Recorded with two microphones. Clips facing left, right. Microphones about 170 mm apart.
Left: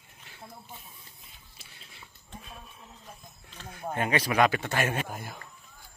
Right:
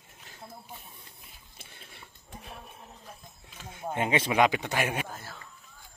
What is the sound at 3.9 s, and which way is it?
A man's voice, 20° right (ahead or behind).